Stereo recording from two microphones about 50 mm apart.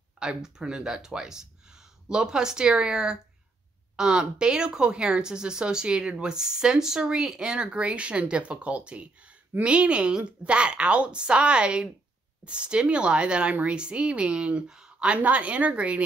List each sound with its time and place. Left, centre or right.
0.2 s a woman's voice: centre
15.1 s a woman's voice: right